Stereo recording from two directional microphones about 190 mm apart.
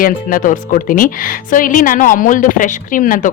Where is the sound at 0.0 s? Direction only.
50° left (ahead or behind).